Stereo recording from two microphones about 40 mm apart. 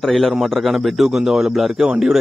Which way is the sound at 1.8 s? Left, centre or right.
Centre.